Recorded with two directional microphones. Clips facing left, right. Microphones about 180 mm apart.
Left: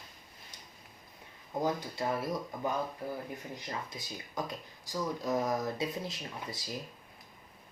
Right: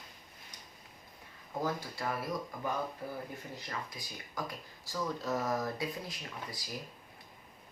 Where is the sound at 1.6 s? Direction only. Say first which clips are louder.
Left 3 dB; 20° left (ahead or behind).